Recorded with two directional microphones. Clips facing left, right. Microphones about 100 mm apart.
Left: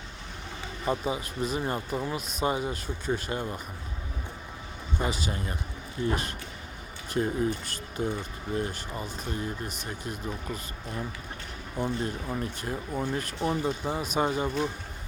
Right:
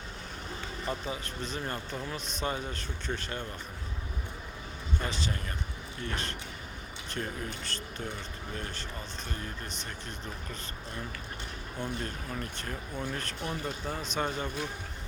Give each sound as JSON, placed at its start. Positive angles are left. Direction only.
{"t": 0.9, "sound": "speech", "side_deg": 15}
{"t": 4.9, "sound": "speech", "side_deg": 10}